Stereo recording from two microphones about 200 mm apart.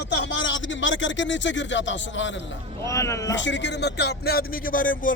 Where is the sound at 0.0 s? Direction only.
65° left (ahead or behind).